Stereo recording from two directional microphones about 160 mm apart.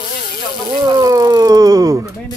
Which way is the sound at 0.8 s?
20° right (ahead or behind).